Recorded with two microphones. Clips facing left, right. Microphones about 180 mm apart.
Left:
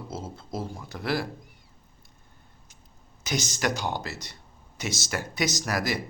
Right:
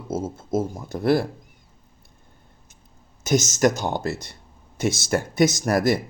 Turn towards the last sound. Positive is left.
turn(degrees=-50)  # may be behind; listen again after turning